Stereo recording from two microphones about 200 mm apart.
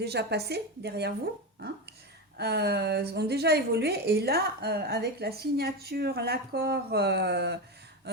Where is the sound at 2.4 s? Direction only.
55° right (ahead or behind).